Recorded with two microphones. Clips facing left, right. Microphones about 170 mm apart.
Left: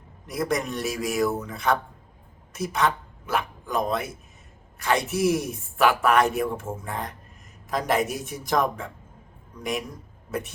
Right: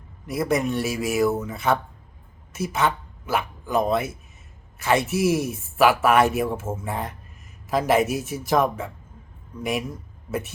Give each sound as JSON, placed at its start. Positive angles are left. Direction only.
{"t": 0.3, "sound": "a man's voice", "side_deg": 0}